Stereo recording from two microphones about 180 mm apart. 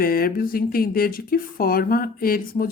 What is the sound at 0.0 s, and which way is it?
A woman's voice, 55° left (ahead or behind).